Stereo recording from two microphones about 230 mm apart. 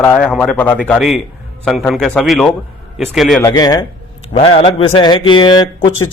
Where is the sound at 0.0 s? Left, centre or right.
Centre.